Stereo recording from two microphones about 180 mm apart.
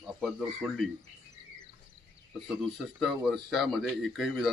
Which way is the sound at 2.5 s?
Centre (ahead or behind).